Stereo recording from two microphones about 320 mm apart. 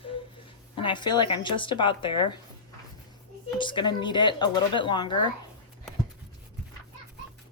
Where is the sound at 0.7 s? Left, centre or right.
Centre.